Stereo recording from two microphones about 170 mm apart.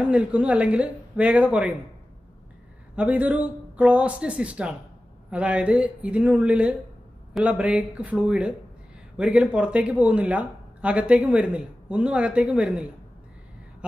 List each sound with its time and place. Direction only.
0.0 s speech: 5° right (ahead or behind)
3.0 s speech: 10° right (ahead or behind)